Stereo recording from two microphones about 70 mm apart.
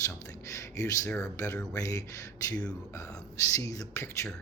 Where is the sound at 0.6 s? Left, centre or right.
Left.